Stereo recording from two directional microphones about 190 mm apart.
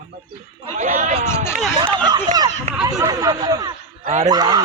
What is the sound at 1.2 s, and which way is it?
Speech, 15° left (ahead or behind).